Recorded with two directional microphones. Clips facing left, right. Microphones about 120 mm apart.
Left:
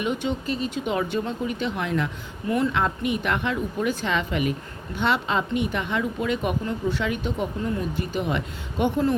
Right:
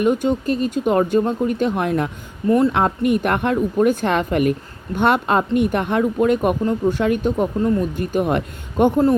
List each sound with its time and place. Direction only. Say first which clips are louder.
0.0 s speech: right 8 dB; 45° right (ahead or behind)
2.5 s a woman's voice: right 8 dB; 35° right (ahead or behind)
2.7 s speech: right 7 dB; 50° right (ahead or behind)